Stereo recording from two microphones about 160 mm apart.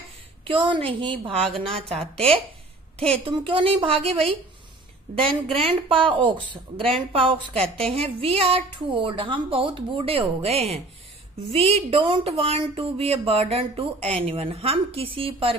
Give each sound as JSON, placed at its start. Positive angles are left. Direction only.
{"t": 0.5, "sound": "a woman's voice", "side_deg": -30}